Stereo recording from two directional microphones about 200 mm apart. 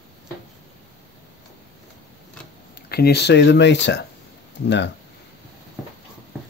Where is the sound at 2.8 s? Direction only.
50° left (ahead or behind).